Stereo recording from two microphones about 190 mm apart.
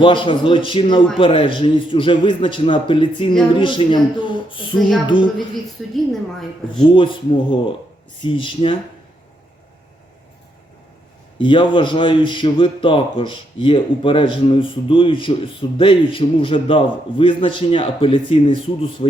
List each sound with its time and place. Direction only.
0.0 s a man's voice: 25° left (ahead or behind)
6.9 s a man's voice: 25° left (ahead or behind)
11.3 s a man's voice: 25° left (ahead or behind)